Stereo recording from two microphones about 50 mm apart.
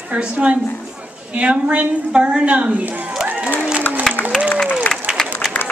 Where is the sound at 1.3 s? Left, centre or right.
Right.